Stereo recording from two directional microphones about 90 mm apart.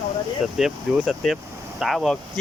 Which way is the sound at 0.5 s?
5° right (ahead or behind).